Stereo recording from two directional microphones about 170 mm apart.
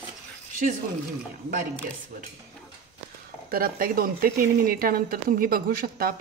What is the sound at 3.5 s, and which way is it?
Speech, 60° right (ahead or behind).